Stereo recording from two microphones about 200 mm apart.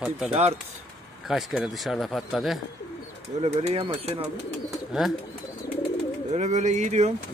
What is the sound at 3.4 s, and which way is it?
Speech, 30° right (ahead or behind).